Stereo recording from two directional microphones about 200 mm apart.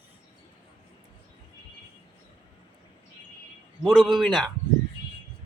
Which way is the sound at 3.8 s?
Centre (ahead or behind).